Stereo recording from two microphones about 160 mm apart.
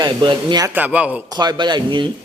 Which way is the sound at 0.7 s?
10° right (ahead or behind).